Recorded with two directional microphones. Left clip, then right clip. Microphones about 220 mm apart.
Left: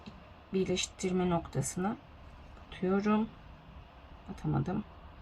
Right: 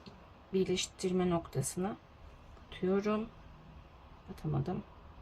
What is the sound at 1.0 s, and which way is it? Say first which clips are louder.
Speech: left 1 dB; 15° right (ahead or behind).